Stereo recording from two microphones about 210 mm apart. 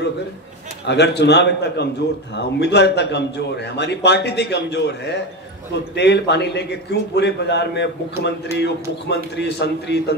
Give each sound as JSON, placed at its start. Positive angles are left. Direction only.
{"t": 0.8, "sound": "a man's voice", "side_deg": 55}